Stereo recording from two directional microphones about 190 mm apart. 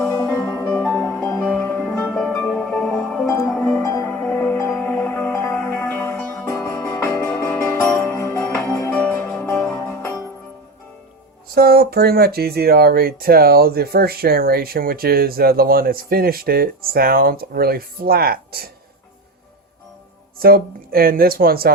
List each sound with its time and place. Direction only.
0.0 s music: 15° left (ahead or behind)
3.2 s music: 15° left (ahead or behind)
3.5 s music: 5° left (ahead or behind)
11.5 s speech: 55° right (ahead or behind)
20.4 s speech: 50° right (ahead or behind)